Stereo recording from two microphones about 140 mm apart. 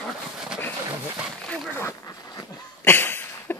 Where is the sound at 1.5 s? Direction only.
20° left (ahead or behind).